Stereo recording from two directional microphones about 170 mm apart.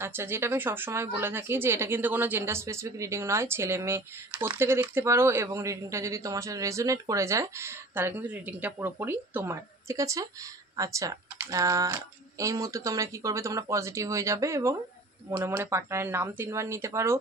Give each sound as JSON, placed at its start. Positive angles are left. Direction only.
{"t": 0.0, "sound": "a woman's voice", "side_deg": -15}